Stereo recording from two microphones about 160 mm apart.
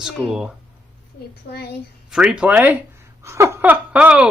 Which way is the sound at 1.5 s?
90° left.